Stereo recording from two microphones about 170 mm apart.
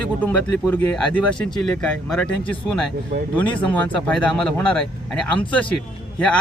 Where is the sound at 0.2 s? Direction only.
10° left (ahead or behind).